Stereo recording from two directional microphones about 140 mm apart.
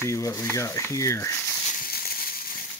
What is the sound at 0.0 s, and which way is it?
Speech, 20° left (ahead or behind).